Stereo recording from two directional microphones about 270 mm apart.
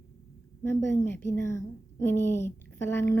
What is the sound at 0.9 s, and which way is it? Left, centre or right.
A woman's voice, centre.